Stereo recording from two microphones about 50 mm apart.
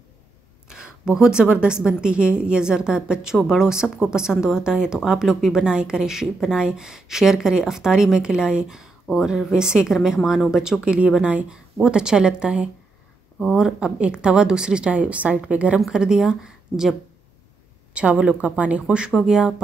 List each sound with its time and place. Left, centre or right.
0.7 s a sound: centre
1.5 s a woman's voice: centre
13.7 s a woman's voice: right
17.9 s a woman's voice: right